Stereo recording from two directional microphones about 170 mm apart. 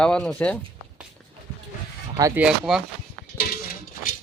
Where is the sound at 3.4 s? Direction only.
60° left (ahead or behind).